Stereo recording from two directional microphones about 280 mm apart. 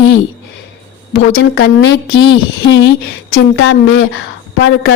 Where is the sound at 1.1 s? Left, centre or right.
Left.